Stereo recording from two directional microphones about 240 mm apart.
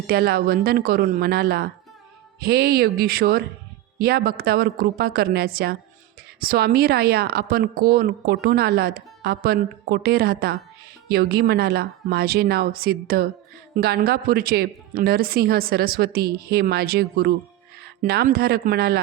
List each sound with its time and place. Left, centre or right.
0.1 s speech: right